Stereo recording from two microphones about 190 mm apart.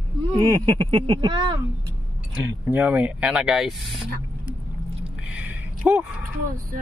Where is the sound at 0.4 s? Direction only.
20° right (ahead or behind).